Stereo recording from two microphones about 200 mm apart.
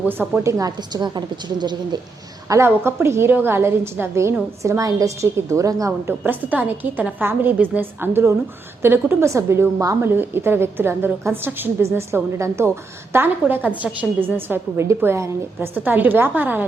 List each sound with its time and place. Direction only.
0.0 s a woman's voice: 10° right (ahead or behind)